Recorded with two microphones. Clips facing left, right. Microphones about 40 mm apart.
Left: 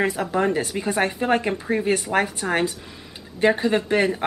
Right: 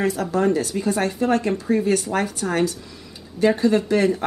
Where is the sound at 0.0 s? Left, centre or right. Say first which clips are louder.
Right 1 dB; left.